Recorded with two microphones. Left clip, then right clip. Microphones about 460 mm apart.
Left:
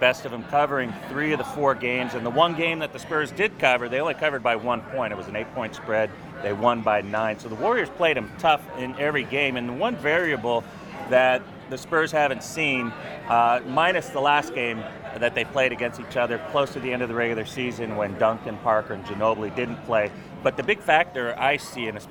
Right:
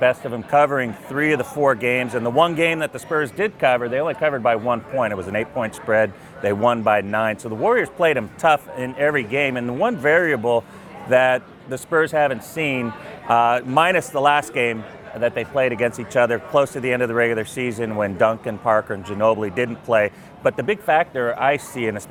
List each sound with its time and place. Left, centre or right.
0.0 s speech: right